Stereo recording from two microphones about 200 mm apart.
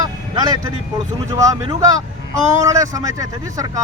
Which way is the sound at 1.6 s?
15° right (ahead or behind).